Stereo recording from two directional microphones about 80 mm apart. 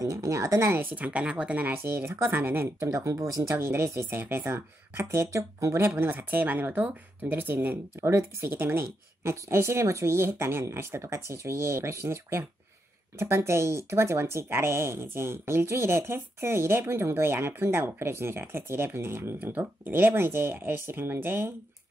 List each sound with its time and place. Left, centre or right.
0.0 s speech: right
0.9 s a woman's voice: centre
1.7 s speech: right
3.5 s speech: right
5.9 s speech: right
8.1 s speech: right